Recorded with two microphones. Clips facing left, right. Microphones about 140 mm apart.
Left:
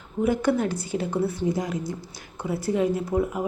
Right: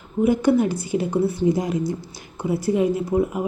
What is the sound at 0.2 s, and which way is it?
Speech, 10° right (ahead or behind).